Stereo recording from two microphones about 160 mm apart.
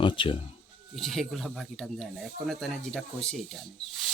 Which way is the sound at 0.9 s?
Centre (ahead or behind).